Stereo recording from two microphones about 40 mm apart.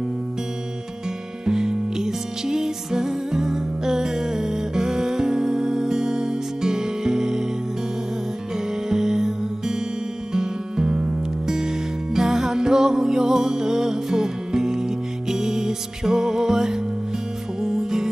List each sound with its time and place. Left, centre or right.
1.4 s music: centre
8.8 s music: centre
11.5 s music: centre